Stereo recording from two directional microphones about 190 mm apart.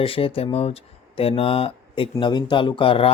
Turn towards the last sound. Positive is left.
turn(degrees=30)  # may be behind; listen again after turning